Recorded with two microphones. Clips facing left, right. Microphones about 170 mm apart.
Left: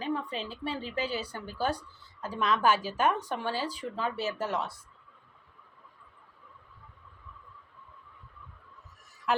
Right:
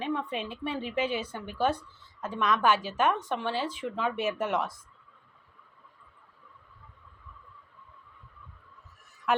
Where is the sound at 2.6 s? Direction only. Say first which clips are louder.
Even; 40° left (ahead or behind).